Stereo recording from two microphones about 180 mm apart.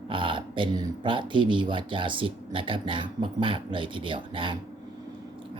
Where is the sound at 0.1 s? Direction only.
30° right (ahead or behind).